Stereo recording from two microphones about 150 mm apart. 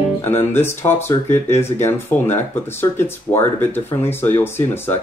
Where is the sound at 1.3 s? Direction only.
50° left (ahead or behind).